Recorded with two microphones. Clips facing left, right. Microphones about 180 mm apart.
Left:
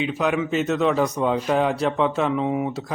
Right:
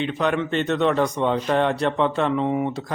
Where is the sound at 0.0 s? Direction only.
5° left (ahead or behind).